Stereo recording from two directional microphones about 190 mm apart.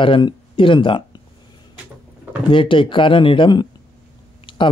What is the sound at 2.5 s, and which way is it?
Speech, 25° left (ahead or behind).